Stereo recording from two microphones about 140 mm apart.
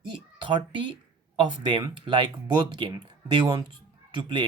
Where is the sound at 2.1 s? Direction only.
35° right (ahead or behind).